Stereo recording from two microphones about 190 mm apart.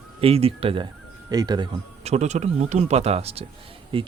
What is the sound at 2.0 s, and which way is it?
Speech, 35° right (ahead or behind).